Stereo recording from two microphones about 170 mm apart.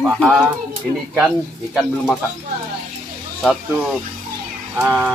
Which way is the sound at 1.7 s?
Centre (ahead or behind).